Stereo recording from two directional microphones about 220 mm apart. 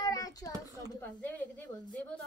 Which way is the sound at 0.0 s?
15° left (ahead or behind).